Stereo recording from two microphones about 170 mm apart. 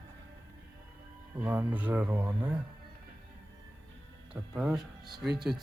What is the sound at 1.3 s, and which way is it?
Speech, 10° right (ahead or behind).